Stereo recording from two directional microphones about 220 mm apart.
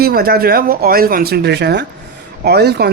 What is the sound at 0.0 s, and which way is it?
Speech, 45° right (ahead or behind).